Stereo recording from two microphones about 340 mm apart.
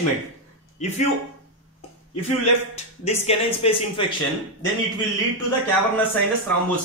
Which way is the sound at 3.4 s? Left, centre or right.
Centre.